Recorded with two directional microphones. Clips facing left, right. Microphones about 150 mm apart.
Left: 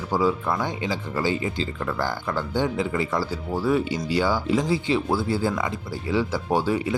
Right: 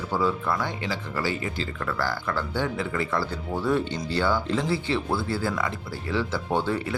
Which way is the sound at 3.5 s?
5° left (ahead or behind).